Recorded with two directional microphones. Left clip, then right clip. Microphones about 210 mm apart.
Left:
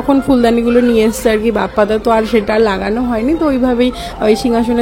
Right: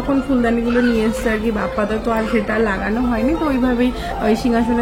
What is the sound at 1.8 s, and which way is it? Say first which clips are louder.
A woman's voice: left 9 dB; 45° left (ahead or behind).